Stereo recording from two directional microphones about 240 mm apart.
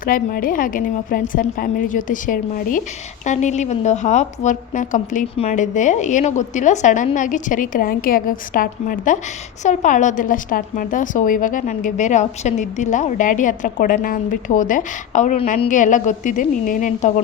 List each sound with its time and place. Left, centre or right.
0.0 s a woman's voice: left